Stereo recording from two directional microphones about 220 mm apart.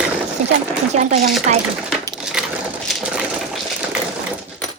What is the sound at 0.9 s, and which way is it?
Speech, 30° right (ahead or behind).